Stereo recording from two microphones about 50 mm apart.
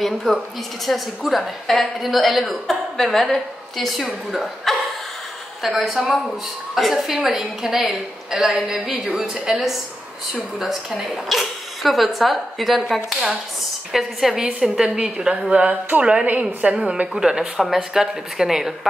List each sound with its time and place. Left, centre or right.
0.0 s a woman's voice: centre
5.8 s a woman's voice: centre
13.9 s a woman's voice: centre
15.6 s speech: right
16.8 s a woman's voice: centre